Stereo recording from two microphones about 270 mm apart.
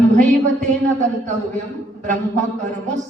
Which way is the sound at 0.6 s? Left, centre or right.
Right.